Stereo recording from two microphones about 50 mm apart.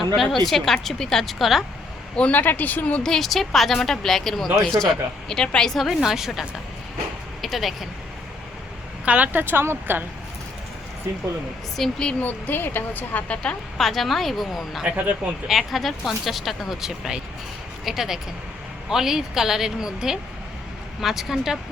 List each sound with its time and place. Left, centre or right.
0.0 s a woman's voice: centre
2.3 s speech: left
3.0 s a woman's voice: centre
5.8 s a woman's voice: centre
7.4 s speech: centre
9.0 s speech: right
9.4 s speech: right
11.8 s a woman's voice: centre
12.2 s speech: left
13.2 s a woman's voice: left
13.7 s a woman's voice: centre
14.8 s speech: right
15.4 s a woman's voice: centre